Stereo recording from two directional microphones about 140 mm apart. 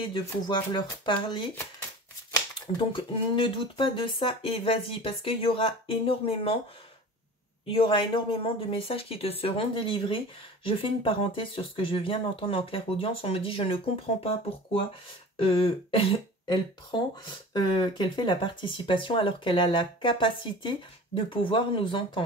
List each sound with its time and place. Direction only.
0.1 s speech: 35° left (ahead or behind)
2.6 s speech: 35° left (ahead or behind)
7.6 s speech: 40° left (ahead or behind)
15.3 s throat clearing: 40° left (ahead or behind)
17.5 s speech: 35° left (ahead or behind)